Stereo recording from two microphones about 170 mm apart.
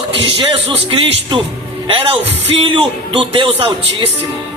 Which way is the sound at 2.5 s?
30° right (ahead or behind).